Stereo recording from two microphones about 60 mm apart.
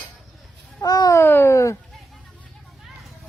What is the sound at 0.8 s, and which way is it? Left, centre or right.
Speech, left.